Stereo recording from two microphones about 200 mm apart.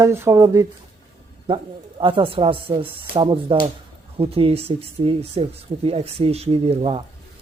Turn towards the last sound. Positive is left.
turn(degrees=-30)  # may be behind; listen again after turning